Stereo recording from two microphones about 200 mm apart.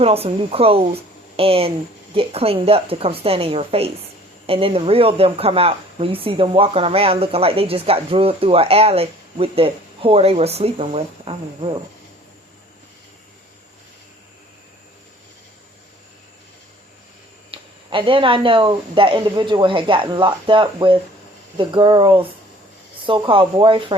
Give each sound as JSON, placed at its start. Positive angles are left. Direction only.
{"t": 0.0, "sound": "speech", "side_deg": -30}
{"t": 17.5, "sound": "speech", "side_deg": -25}